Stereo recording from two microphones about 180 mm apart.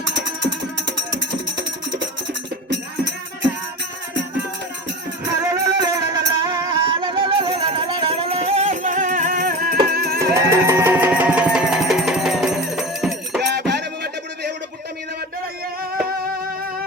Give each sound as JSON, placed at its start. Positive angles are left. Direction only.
{"t": 5.4, "sound": "music", "side_deg": -20}
{"t": 10.3, "sound": "music", "side_deg": -15}
{"t": 13.4, "sound": "music", "side_deg": -65}